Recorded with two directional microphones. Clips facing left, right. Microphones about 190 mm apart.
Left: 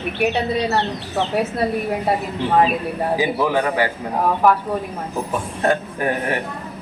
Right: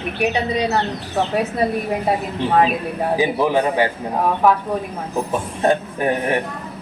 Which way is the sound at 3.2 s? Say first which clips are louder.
Right 3 dB; 20° right (ahead or behind).